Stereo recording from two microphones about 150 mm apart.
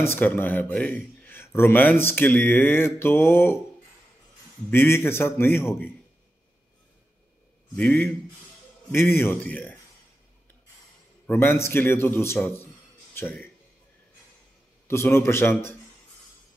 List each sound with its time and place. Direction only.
0.0 s a man's voice: 15° left (ahead or behind)
4.6 s a man's voice: 15° left (ahead or behind)
7.7 s a man's voice: 10° left (ahead or behind)
11.2 s a man's voice: 15° left (ahead or behind)
14.9 s a man's voice: 15° left (ahead or behind)